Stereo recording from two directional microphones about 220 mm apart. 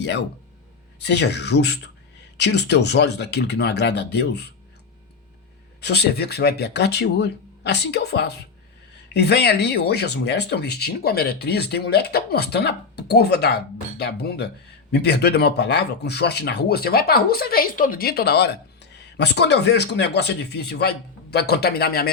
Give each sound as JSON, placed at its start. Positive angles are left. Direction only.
{"t": 0.9, "sound": "speech", "side_deg": 50}
{"t": 5.8, "sound": "speech", "side_deg": 50}